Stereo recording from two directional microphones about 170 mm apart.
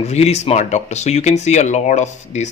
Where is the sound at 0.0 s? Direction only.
40° left (ahead or behind).